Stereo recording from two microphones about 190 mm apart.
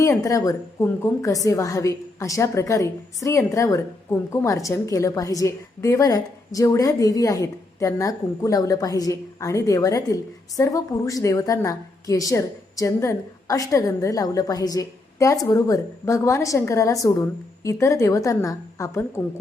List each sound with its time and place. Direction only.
0.0 s a woman's voice: 15° left (ahead or behind)